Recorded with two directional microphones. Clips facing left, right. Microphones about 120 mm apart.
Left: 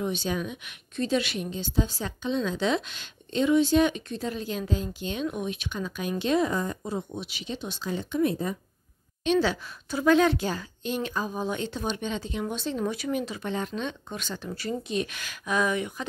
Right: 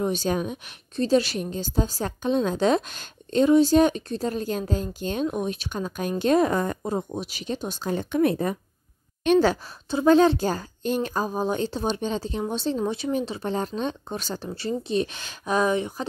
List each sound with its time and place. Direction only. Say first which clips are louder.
0.0 s a woman's voice: right 4 dB; 40° right (ahead or behind); by 8.5 s 65° right (ahead or behind)
9.2 s a woman's voice: right 5 dB; 50° right (ahead or behind)
9.8 s a woman's voice: right 4 dB; 30° right (ahead or behind)